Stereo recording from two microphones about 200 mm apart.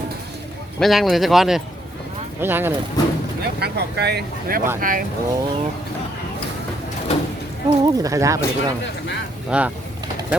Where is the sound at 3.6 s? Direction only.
55° right (ahead or behind).